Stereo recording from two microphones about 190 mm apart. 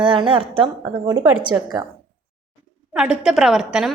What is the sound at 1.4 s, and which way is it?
Speech, 20° right (ahead or behind).